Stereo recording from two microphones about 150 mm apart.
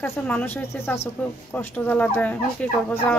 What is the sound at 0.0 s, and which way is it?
Speech, 10° left (ahead or behind).